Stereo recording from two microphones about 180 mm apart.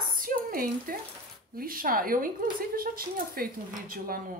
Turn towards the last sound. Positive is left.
turn(degrees=-50)  # may be behind; listen again after turning